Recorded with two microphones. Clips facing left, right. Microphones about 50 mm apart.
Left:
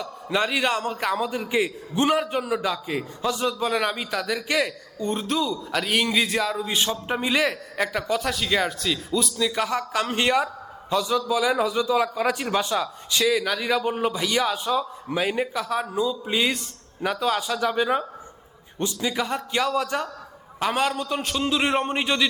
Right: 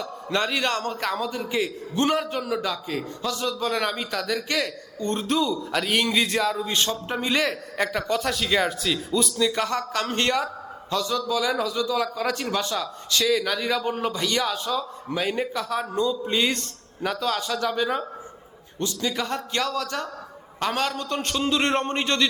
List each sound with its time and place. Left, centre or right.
0.0 s a man's voice: centre
19.1 s a man's voice: centre